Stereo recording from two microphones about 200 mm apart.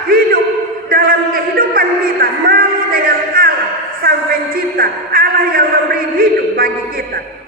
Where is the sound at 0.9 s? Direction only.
45° right (ahead or behind).